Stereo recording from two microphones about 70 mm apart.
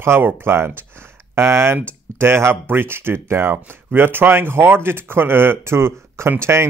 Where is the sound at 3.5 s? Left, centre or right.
Right.